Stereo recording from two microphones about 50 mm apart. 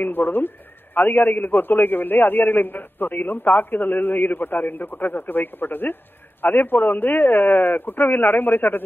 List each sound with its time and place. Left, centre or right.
0.0 s a man's voice: left